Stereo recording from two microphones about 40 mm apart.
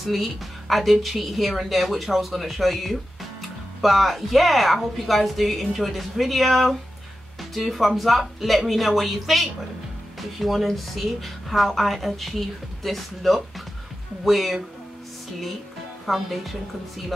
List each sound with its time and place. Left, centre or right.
0.0 s a woman's voice: centre
16.1 s a woman's voice: centre